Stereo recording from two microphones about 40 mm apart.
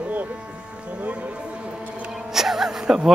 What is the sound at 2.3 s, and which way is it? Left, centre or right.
Music, centre.